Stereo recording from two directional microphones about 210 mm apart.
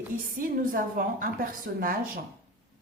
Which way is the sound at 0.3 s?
40° right (ahead or behind).